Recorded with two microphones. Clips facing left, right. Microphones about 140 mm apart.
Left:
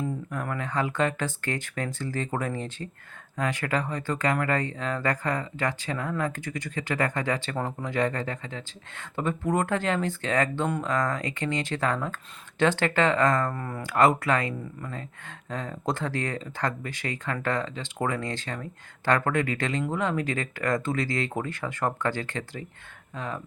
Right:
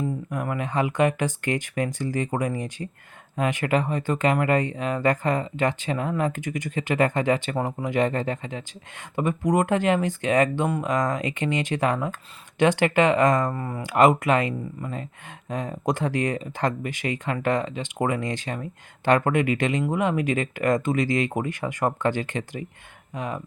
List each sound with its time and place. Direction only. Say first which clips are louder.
0.3 s speech: right 3 dB; 15° right (ahead or behind)